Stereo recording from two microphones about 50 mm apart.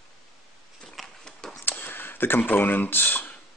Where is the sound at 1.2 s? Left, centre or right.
Centre.